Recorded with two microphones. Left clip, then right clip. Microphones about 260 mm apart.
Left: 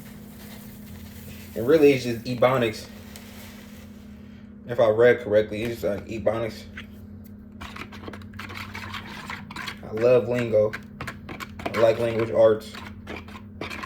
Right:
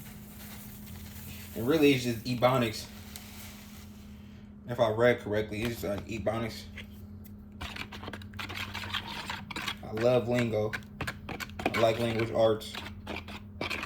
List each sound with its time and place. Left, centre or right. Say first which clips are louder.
1.7 s speech: left 8 dB; centre
4.7 s speech: left 8 dB; centre
7.6 s a sound: left 2 dB; centre